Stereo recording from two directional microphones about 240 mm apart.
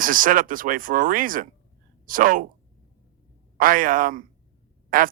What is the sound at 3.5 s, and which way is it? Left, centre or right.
A man's voice, right.